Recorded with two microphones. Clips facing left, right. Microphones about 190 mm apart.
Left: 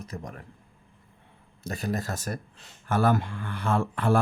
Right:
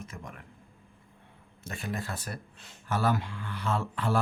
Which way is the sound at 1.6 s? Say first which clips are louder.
Left 5 dB; 40° left (ahead or behind).